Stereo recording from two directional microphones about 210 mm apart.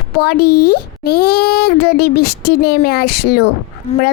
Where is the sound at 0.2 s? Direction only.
50° left (ahead or behind).